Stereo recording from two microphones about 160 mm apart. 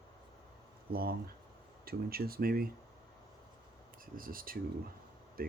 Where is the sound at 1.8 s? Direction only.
70° right (ahead or behind).